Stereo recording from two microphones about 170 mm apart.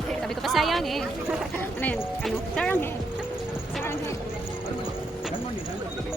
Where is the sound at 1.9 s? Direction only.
Centre (ahead or behind).